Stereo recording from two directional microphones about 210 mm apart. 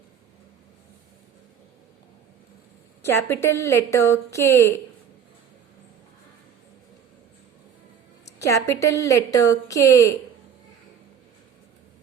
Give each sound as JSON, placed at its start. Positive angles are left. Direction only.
{"t": 3.0, "sound": "a woman's voice", "side_deg": 10}
{"t": 8.4, "sound": "a woman's voice", "side_deg": 15}